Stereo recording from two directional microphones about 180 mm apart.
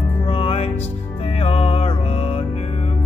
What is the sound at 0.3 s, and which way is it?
Music, 35° left (ahead or behind).